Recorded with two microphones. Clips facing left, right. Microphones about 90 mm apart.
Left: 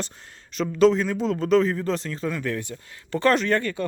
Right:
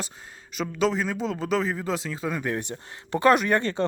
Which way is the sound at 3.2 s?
15° right (ahead or behind).